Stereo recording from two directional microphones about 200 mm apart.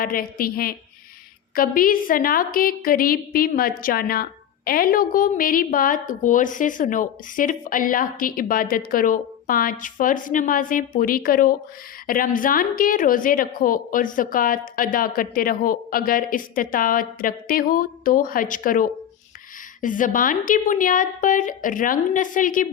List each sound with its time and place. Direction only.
0.0 s a woman's voice: 45° left (ahead or behind)